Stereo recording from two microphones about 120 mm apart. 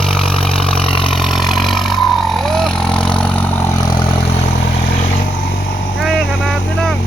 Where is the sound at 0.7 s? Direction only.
50° left (ahead or behind).